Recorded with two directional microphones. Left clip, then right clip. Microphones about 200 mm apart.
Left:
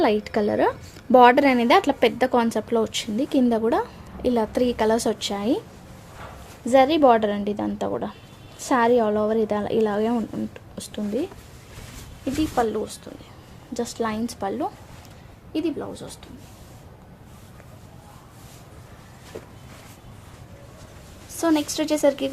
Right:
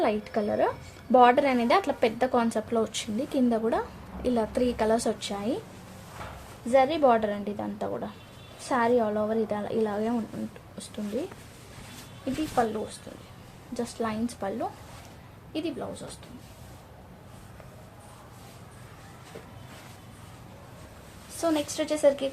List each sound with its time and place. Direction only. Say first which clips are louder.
0.0 s speech: left 6 dB; 40° left (ahead or behind)
6.7 s a woman's voice: left 5 dB; 45° left (ahead or behind)
12.6 s speech: left 3 dB; 40° left (ahead or behind)
13.7 s a woman's voice: left 5 dB; 45° left (ahead or behind)
21.4 s speech: left 5 dB; 40° left (ahead or behind)